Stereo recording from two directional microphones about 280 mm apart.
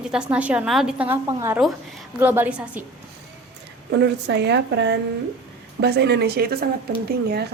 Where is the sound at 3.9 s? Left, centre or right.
Right.